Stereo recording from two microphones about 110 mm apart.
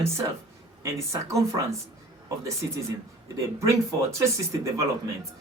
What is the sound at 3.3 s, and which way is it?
Speech, 30° right (ahead or behind).